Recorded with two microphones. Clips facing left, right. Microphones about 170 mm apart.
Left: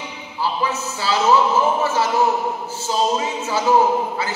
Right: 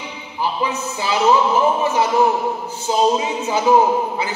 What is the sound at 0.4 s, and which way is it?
Speech, 15° right (ahead or behind).